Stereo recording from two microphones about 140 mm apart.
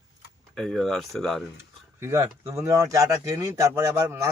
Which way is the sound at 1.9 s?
20° right (ahead or behind).